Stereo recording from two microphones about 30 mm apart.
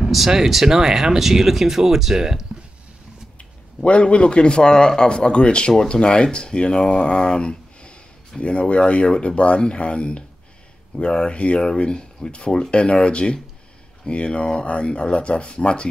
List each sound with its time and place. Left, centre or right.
0.3 s speech: centre
3.3 s speech: left
8.4 s speech: left
11.8 s speech: left